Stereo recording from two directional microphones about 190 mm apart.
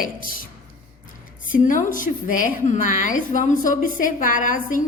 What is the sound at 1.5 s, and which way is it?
A woman's voice, 45° left (ahead or behind).